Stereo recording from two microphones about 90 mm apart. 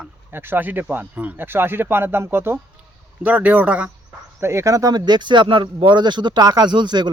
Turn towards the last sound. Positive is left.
turn(degrees=-55)  # may be behind; listen again after turning